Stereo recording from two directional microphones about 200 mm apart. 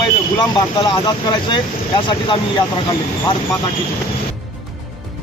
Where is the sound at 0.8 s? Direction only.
20° left (ahead or behind).